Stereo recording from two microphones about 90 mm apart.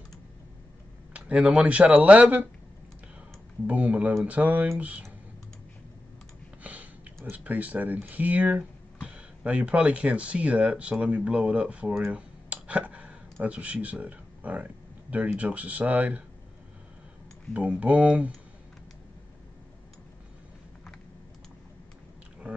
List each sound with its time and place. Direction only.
1.1 s speech: 10° right (ahead or behind)
3.6 s speech: 15° right (ahead or behind)
6.6 s a sound: 15° right (ahead or behind)
7.2 s speech: 15° right (ahead or behind)
17.6 s speech: 15° right (ahead or behind)